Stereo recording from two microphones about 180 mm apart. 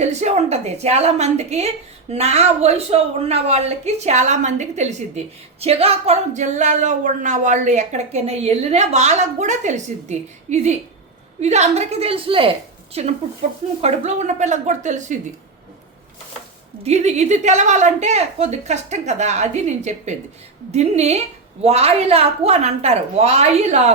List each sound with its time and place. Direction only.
0.0 s a woman's voice: 40° right (ahead or behind)
16.8 s a woman's voice: 35° right (ahead or behind)